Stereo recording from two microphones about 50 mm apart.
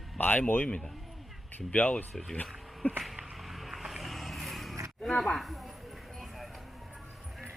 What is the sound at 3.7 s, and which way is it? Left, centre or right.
Vehicle, centre.